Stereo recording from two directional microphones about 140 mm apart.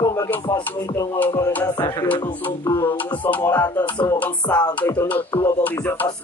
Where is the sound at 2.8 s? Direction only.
15° left (ahead or behind).